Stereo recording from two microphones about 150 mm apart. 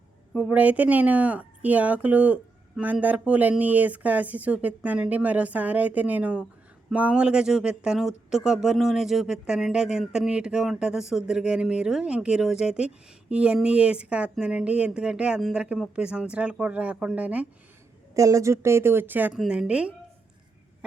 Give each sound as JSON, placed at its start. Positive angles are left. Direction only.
{"t": 0.3, "sound": "speech", "side_deg": -10}
{"t": 18.1, "sound": "speech", "side_deg": -20}